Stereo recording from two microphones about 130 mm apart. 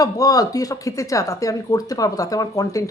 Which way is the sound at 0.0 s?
30° left (ahead or behind).